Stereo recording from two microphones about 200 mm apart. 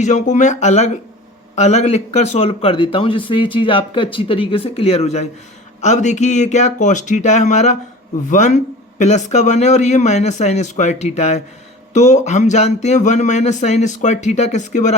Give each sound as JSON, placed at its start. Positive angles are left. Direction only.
{"t": 0.0, "sound": "a man's voice", "side_deg": 35}